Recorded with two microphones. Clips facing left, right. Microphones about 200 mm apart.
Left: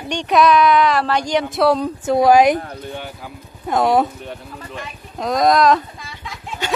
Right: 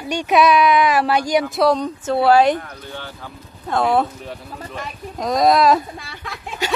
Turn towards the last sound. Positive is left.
turn(degrees=-55)  # may be behind; listen again after turning